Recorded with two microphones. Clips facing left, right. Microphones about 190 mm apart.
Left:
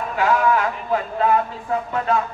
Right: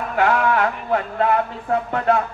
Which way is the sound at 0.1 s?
60° right (ahead or behind).